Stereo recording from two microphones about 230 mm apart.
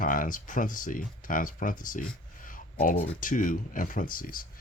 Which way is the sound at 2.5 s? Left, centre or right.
Left.